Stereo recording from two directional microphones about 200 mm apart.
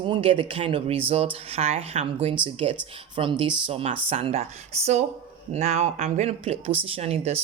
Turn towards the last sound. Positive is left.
turn(degrees=-30)  # may be behind; listen again after turning